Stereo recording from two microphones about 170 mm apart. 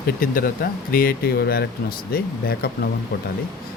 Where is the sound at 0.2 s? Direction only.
55° left (ahead or behind).